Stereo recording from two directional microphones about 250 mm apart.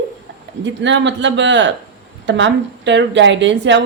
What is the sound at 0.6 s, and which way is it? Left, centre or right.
A woman's voice, right.